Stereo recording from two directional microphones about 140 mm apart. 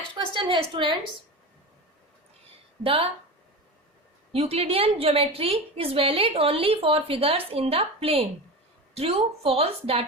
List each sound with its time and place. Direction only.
0.1 s a sound: 35° right (ahead or behind)
2.8 s a woman's voice: 40° right (ahead or behind)
4.3 s a woman's voice: 45° right (ahead or behind)